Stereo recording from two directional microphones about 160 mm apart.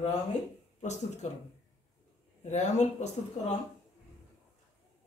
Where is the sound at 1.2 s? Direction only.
45° left (ahead or behind).